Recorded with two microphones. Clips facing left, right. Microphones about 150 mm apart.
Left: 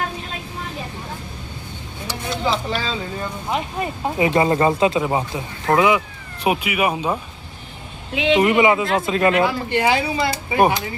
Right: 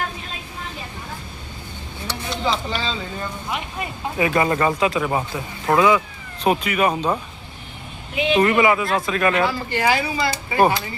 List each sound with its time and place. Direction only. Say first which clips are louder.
2.0 s a sound: left 1 dB; 5° left (ahead or behind)
3.5 s speech: left 9 dB; 35° left (ahead or behind)
4.2 s speech: left 2 dB; 25° left (ahead or behind); by 7.2 s 5° left (ahead or behind)
8.1 s speech: left 3 dB; 90° left
8.4 s speech: even; 20° left (ahead or behind)